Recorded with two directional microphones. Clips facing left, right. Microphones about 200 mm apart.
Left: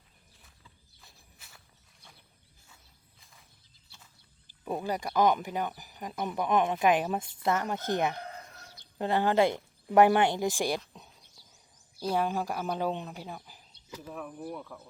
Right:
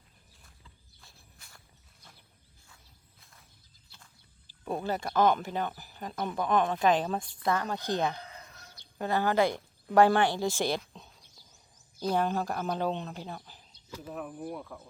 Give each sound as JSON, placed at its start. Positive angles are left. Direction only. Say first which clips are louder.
{"t": 1.0, "sound": "walk", "louder": "even", "side_deg": 5}
{"t": 3.2, "sound": "a sound", "louder": "left 1 dB", "side_deg": 0}
{"t": 4.6, "sound": "speech", "louder": "even", "side_deg": 10}
{"t": 11.9, "sound": "speech", "louder": "right 1 dB", "side_deg": 5}